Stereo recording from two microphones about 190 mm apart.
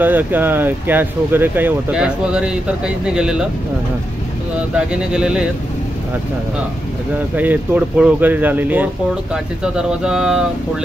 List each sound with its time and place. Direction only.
0.0 s speech: 10° right (ahead or behind)
4.7 s speech: 5° right (ahead or behind)
7.3 s speech: 10° right (ahead or behind)